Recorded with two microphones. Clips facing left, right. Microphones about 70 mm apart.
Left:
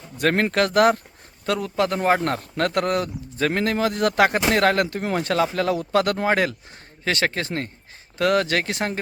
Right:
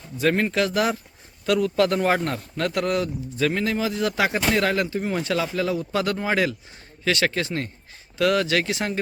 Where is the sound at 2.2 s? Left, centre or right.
Left.